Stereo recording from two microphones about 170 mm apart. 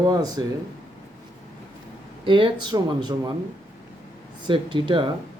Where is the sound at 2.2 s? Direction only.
30° right (ahead or behind).